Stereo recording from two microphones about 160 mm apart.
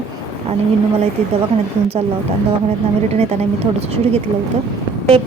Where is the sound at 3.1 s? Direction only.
40° right (ahead or behind).